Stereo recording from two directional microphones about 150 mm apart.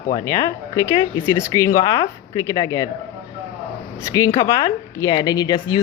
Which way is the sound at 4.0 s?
20° left (ahead or behind).